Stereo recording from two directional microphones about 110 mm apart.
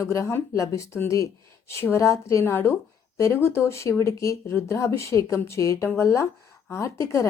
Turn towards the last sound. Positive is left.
turn(degrees=25)  # may be behind; listen again after turning